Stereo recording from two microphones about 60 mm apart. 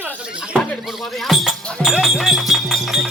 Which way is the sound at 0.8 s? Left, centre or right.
Centre.